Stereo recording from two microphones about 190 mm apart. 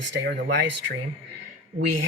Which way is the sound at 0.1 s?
60° right (ahead or behind).